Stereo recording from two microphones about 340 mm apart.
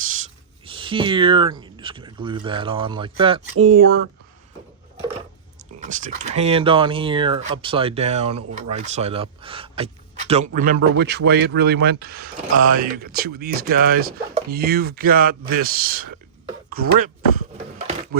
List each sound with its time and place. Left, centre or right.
0.6 s speech: centre
5.5 s speech: right